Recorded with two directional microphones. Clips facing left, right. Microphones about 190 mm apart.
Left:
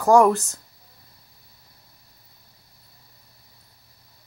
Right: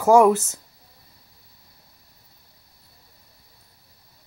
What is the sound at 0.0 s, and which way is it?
Speech, 5° right (ahead or behind).